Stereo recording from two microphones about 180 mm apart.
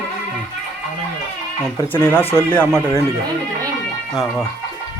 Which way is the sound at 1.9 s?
10° left (ahead or behind).